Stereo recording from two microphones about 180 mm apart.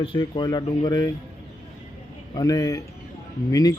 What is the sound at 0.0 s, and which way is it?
Speech, 30° left (ahead or behind).